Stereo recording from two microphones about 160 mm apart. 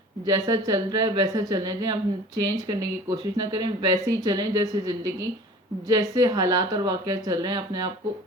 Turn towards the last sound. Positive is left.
turn(degrees=-25)  # may be behind; listen again after turning